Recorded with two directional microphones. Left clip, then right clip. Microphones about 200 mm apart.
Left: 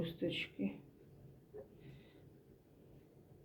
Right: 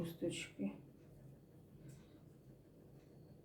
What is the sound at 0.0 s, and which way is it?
Speech, 35° left (ahead or behind).